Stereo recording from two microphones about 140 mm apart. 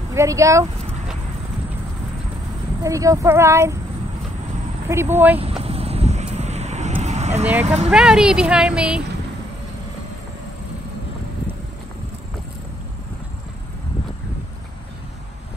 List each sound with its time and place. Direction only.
0.1 s speech: 20° right (ahead or behind)
2.8 s speech: 25° right (ahead or behind)
4.8 s speech: 15° right (ahead or behind)
5.6 s vehicle: 45° right (ahead or behind)
7.6 s speech: 50° right (ahead or behind)
7.9 s speech: 5° right (ahead or behind)